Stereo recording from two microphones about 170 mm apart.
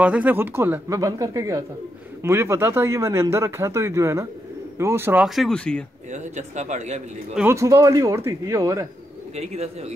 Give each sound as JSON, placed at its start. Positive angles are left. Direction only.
{"t": 0.0, "sound": "speech", "side_deg": -10}
{"t": 5.2, "sound": "speech", "side_deg": 0}
{"t": 6.1, "sound": "speech", "side_deg": -45}
{"t": 7.3, "sound": "speech", "side_deg": -15}
{"t": 9.3, "sound": "a man's voice", "side_deg": -40}